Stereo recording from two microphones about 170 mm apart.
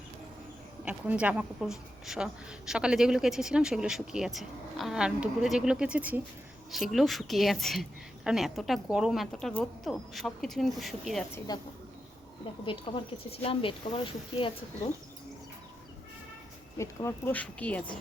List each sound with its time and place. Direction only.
0.9 s speech: 10° right (ahead or behind)
11.5 s speech: 25° left (ahead or behind)
16.7 s speech: 15° left (ahead or behind)